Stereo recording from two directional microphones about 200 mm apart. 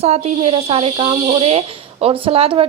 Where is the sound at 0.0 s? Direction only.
30° right (ahead or behind).